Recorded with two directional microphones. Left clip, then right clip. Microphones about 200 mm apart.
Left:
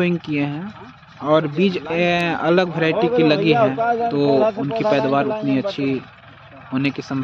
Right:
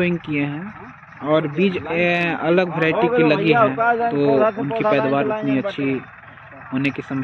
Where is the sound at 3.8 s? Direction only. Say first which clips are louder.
Right 1 dB; 20° right (ahead or behind).